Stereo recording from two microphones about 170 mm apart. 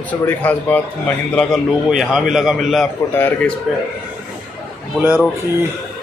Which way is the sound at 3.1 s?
10° left (ahead or behind).